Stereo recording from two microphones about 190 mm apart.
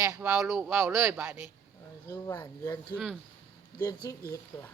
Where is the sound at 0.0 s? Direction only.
10° right (ahead or behind).